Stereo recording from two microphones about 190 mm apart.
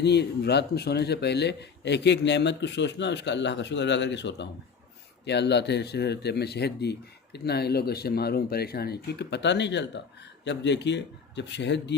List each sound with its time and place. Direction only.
0.0 s speech: 60° left (ahead or behind)